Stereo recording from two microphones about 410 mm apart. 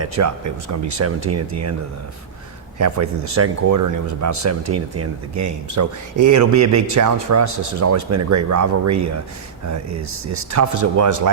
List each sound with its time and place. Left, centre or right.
0.0 s speech: right
2.7 s speech: right